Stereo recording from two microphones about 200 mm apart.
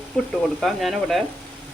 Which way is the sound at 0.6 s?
Centre (ahead or behind).